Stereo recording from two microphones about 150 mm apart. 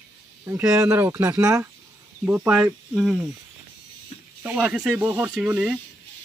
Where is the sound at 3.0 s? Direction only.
Centre (ahead or behind).